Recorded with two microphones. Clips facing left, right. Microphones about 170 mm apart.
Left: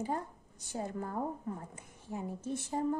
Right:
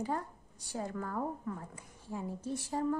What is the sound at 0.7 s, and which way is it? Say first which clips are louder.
A woman's voice: even; 20° left (ahead or behind).